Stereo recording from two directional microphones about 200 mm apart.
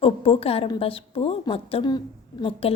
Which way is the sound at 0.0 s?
30° left (ahead or behind).